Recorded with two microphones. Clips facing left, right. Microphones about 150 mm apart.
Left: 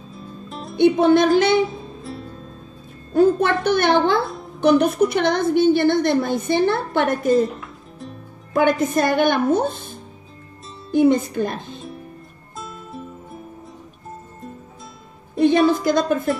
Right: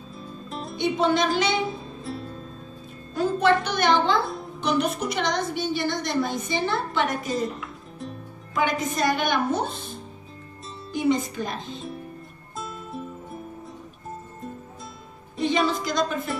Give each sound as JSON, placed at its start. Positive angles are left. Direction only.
{"t": 0.1, "sound": "music", "side_deg": 0}
{"t": 0.7, "sound": "a woman's voice", "side_deg": 55}
{"t": 2.0, "sound": "music", "side_deg": 0}
{"t": 3.1, "sound": "a woman's voice", "side_deg": 55}
{"t": 8.5, "sound": "a woman's voice", "side_deg": 55}
{"t": 10.9, "sound": "a woman's voice", "side_deg": 55}
{"t": 12.5, "sound": "music", "side_deg": 0}
{"t": 15.3, "sound": "a woman's voice", "side_deg": 55}